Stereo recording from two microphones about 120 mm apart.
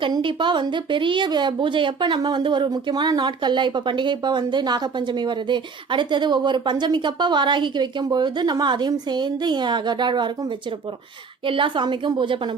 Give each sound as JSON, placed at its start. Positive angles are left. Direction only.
{"t": 0.0, "sound": "a woman's voice", "side_deg": -45}